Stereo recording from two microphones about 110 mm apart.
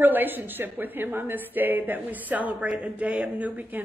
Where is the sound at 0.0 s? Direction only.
15° right (ahead or behind).